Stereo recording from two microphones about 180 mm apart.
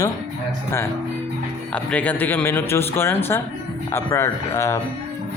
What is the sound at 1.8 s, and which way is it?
A man's voice, 10° left (ahead or behind).